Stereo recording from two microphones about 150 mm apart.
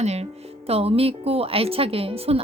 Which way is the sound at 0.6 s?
40° right (ahead or behind).